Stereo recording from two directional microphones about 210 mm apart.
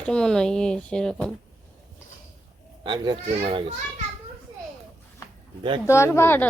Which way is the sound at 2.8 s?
20° right (ahead or behind).